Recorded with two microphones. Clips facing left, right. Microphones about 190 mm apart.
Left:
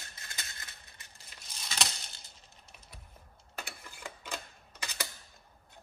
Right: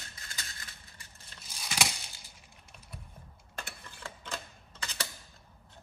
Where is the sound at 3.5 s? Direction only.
10° left (ahead or behind).